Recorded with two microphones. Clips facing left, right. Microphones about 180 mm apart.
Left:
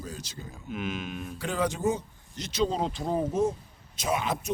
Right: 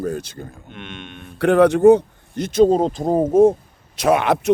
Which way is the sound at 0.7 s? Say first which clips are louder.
Left 2 dB; centre (ahead or behind).